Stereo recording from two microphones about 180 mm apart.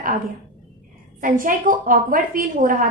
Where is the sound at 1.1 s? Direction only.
50° right (ahead or behind).